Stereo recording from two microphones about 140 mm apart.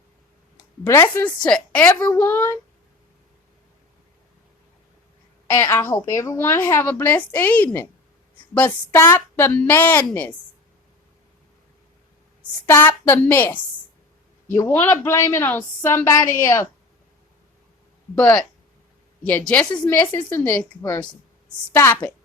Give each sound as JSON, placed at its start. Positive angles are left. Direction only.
{"t": 0.5, "sound": "a sound", "side_deg": 20}
{"t": 1.2, "sound": "a woman's voice", "side_deg": 5}
{"t": 5.6, "sound": "a woman's voice", "side_deg": 20}
{"t": 12.4, "sound": "a woman's voice", "side_deg": 15}
{"t": 18.1, "sound": "a woman's voice", "side_deg": 10}